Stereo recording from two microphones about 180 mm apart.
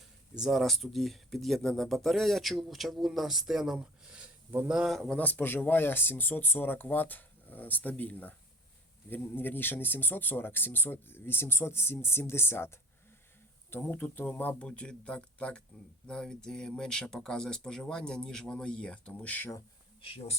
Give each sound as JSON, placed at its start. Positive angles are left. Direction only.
{"t": 0.4, "sound": "speech", "side_deg": 0}
{"t": 20.0, "sound": "speech", "side_deg": 30}